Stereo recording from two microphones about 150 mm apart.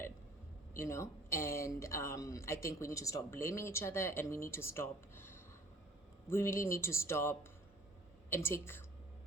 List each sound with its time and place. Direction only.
0.8 s speech: 20° left (ahead or behind)